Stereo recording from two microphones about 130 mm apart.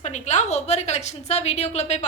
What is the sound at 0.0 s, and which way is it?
A woman's voice, 60° left (ahead or behind).